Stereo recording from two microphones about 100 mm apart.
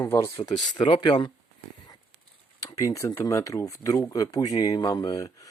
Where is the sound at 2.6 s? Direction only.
35° left (ahead or behind).